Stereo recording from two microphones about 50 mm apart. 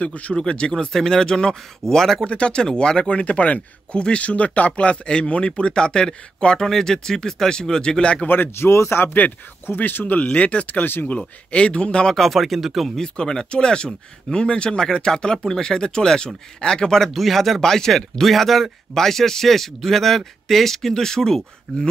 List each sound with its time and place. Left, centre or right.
0.0 s speech: left; by 2.2 s centre
2.2 s speech: left
8.3 s speech: left
9.8 s speech: left
10.2 s speech: left
11.1 s speech: left
12.2 s speech: centre
12.9 s speech: centre
17.6 s speech: centre